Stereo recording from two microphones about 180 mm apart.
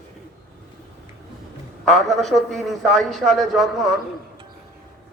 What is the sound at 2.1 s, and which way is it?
A man's voice, centre (ahead or behind).